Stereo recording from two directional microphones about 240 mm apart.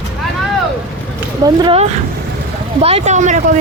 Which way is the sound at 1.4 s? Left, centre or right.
Centre.